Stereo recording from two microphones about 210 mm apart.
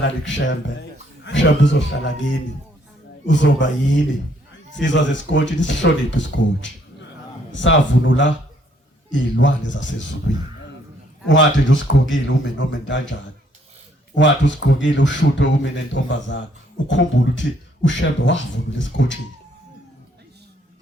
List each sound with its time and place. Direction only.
0.0 s a man's voice: 60° left (ahead or behind)
14.2 s a man's voice: 60° left (ahead or behind)